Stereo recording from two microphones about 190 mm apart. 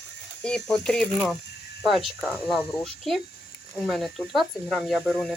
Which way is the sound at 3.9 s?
Centre (ahead or behind).